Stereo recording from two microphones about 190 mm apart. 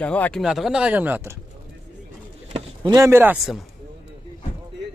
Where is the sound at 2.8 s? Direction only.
15° right (ahead or behind).